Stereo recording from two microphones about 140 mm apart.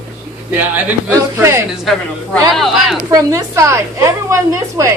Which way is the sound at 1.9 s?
Centre (ahead or behind).